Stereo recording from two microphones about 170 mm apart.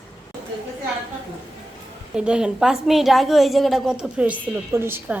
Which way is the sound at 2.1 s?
5° right (ahead or behind).